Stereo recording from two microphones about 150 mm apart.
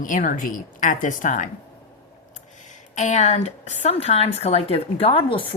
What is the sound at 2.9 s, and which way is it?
A woman's voice, 50° left (ahead or behind).